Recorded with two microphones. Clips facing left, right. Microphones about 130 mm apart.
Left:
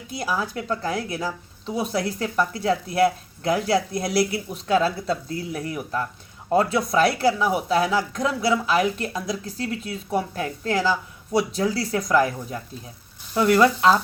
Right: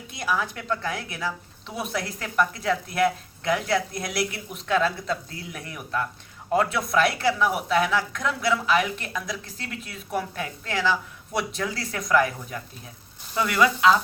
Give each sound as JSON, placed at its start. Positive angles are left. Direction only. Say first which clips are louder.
{"t": 0.2, "sound": "speech", "louder": "left 1 dB", "side_deg": 30}